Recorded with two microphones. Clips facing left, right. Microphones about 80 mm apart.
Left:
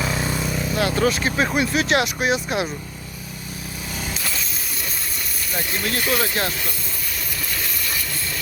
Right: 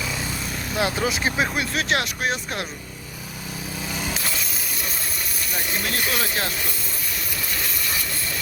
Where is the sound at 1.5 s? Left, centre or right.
Centre.